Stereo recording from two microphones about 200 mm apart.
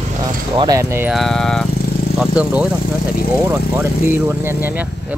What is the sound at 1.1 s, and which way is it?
Speech, centre (ahead or behind).